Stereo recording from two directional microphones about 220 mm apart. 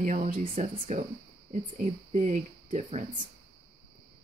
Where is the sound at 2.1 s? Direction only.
35° right (ahead or behind).